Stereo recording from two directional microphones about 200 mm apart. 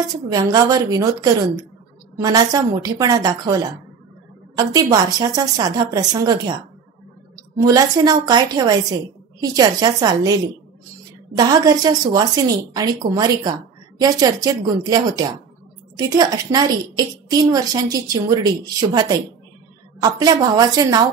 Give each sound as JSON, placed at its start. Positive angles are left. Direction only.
{"t": 0.1, "sound": "a woman's voice", "side_deg": -20}
{"t": 7.6, "sound": "a woman's voice", "side_deg": -20}